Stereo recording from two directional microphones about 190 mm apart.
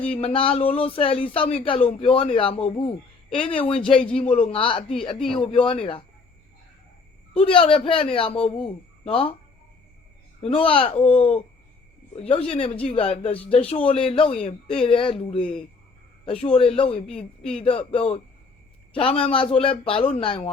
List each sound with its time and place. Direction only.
0.1 s speech: 30° left (ahead or behind)
4.2 s speech: 40° left (ahead or behind)
4.6 s speech: 30° left (ahead or behind)
5.2 s a woman's voice: centre (ahead or behind)
5.5 s speech: 30° left (ahead or behind)
7.4 s speech: 30° left (ahead or behind)
10.4 s speech: 30° left (ahead or behind)
17.1 s a woman's voice: 5° left (ahead or behind)
17.6 s speech: 30° left (ahead or behind)
19.2 s speech: 30° left (ahead or behind)